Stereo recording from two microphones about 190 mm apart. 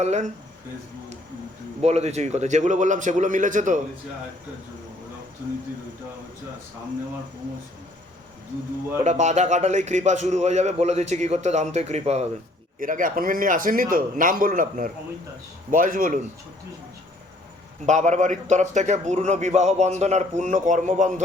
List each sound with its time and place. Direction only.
0.0 s a man's voice: 35° right (ahead or behind)
1.8 s a man's voice: 35° right (ahead or behind)
9.0 s a man's voice: 40° right (ahead or behind)
12.8 s speech: 45° right (ahead or behind)
17.8 s a man's voice: 40° right (ahead or behind)